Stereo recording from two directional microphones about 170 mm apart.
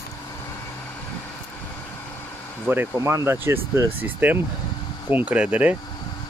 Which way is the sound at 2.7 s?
15° right (ahead or behind).